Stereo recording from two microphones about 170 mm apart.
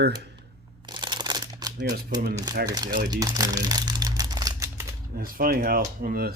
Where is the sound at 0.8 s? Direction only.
25° right (ahead or behind).